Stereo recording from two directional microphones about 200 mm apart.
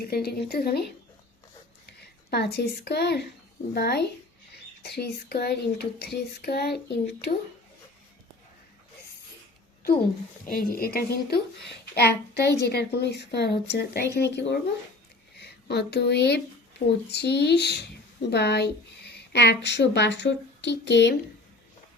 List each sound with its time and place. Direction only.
0.0 s a woman's voice: 50° left (ahead or behind)
1.9 s a woman's voice: 55° left (ahead or behind)
10.4 s a woman's voice: 45° left (ahead or behind)